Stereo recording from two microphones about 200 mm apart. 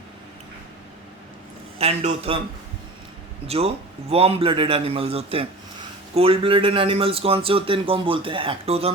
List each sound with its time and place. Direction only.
1.8 s a man's voice: 30° right (ahead or behind)
3.4 s a man's voice: 30° right (ahead or behind)